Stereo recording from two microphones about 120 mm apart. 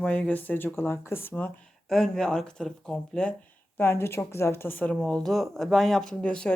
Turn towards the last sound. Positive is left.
turn(degrees=5)  # may be behind; listen again after turning